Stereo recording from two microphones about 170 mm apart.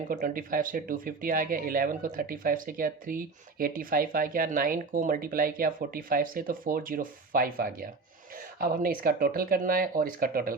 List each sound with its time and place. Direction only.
0.1 s speech: 55° right (ahead or behind)